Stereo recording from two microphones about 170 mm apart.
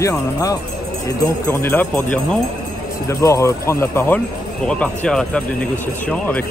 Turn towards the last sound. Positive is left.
turn(degrees=10)  # may be behind; listen again after turning